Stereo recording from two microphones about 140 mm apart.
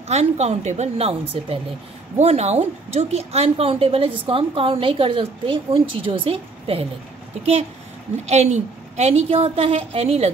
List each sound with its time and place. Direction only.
0.1 s a woman's voice: 50° right (ahead or behind)
8.3 s a woman's voice: 55° right (ahead or behind)